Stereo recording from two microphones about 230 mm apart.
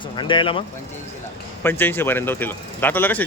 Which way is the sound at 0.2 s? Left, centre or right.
Left.